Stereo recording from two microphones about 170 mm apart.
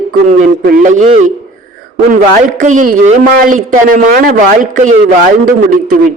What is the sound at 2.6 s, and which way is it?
Speech, 50° right (ahead or behind).